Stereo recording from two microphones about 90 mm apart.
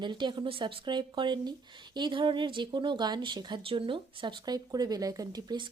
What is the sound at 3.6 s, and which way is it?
Speech, 75° right (ahead or behind).